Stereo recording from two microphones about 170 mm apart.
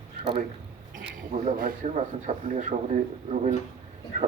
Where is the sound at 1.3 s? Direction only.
50° right (ahead or behind).